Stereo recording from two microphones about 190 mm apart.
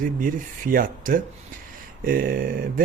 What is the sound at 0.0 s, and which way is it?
Speech, 45° right (ahead or behind).